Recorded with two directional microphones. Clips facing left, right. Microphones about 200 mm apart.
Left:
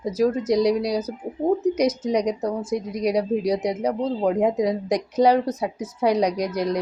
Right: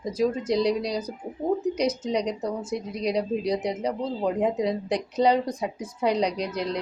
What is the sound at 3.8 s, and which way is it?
Speech, 65° left (ahead or behind).